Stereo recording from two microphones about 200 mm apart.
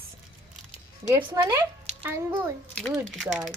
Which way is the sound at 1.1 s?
15° right (ahead or behind).